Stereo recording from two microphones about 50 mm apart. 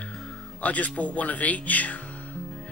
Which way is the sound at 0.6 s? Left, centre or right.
Left.